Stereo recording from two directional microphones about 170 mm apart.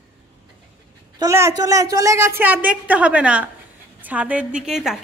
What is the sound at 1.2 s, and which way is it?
A woman's voice, 15° right (ahead or behind).